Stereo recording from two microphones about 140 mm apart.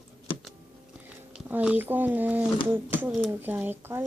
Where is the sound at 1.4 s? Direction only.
10° right (ahead or behind).